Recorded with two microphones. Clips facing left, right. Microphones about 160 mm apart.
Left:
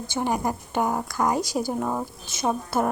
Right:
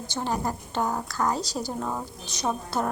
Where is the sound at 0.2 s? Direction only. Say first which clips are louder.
Left 3 dB; 15° left (ahead or behind).